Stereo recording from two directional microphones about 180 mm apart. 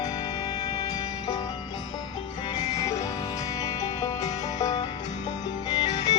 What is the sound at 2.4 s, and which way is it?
Music, 20° left (ahead or behind).